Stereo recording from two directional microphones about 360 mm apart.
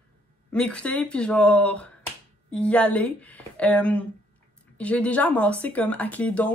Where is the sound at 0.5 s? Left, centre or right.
Centre.